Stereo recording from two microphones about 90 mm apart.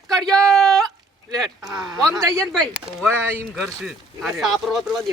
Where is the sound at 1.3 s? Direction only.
5° right (ahead or behind).